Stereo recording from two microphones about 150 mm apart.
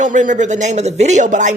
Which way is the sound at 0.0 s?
55° right (ahead or behind).